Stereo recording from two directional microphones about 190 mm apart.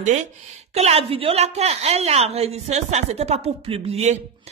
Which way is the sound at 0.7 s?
30° right (ahead or behind).